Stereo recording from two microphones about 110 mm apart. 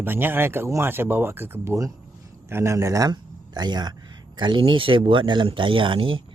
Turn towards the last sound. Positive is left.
turn(degrees=-50)  # may be behind; listen again after turning